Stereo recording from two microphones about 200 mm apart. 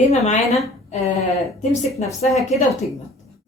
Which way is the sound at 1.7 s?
35° left (ahead or behind).